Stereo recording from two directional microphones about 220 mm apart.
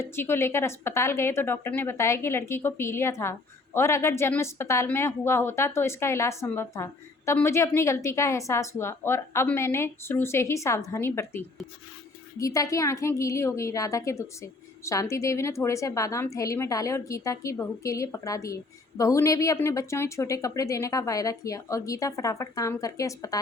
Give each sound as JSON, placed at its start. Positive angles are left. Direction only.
{"t": 0.0, "sound": "a woman's voice", "side_deg": 10}